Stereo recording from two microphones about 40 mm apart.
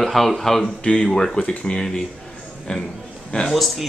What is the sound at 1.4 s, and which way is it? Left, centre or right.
Speech, left.